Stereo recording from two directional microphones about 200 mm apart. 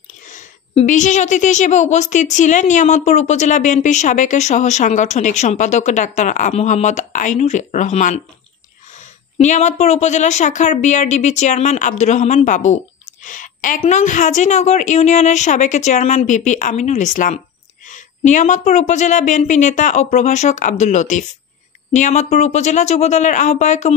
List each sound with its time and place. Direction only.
0.3 s a woman's voice: 40° left (ahead or behind)